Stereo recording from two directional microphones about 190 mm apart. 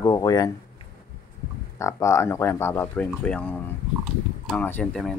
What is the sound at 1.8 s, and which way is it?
Speech, 15° left (ahead or behind).